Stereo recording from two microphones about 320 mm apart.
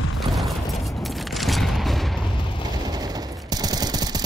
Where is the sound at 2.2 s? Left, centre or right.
Centre.